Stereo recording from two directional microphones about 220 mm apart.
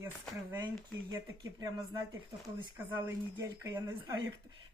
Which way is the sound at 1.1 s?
15° right (ahead or behind).